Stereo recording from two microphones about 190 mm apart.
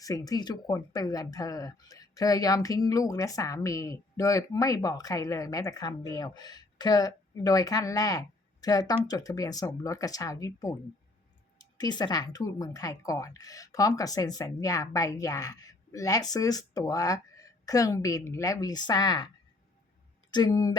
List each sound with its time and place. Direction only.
0.0 s speech: 20° left (ahead or behind)
20.3 s speech: 20° left (ahead or behind)